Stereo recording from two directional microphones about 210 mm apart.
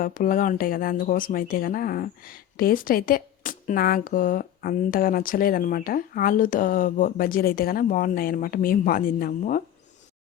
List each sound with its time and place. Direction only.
0.0 s speech: 40° left (ahead or behind)